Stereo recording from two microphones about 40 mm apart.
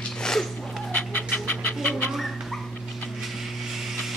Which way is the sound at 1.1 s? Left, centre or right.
Left.